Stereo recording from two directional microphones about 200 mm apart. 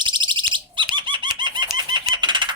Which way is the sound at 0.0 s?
25° right (ahead or behind).